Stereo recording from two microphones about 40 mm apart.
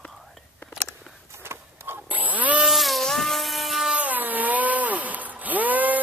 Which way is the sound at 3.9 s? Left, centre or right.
Right.